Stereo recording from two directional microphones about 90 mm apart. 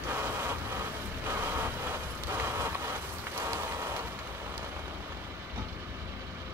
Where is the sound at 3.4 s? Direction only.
30° right (ahead or behind).